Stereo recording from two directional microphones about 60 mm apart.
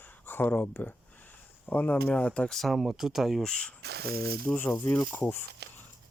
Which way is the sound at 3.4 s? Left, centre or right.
Centre.